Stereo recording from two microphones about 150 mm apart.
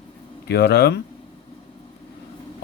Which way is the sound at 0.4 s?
90° left.